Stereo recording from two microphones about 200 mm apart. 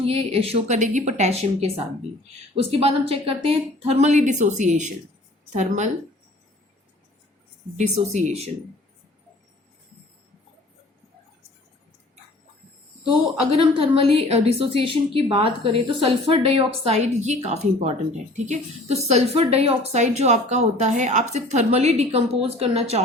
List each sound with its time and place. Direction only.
0.0 s speech: 30° right (ahead or behind)
7.8 s speech: 35° right (ahead or behind)
13.6 s a woman's voice: 25° right (ahead or behind)